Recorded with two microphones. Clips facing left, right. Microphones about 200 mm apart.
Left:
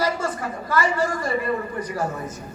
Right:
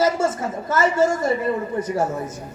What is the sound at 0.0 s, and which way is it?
A woman's voice, 25° right (ahead or behind).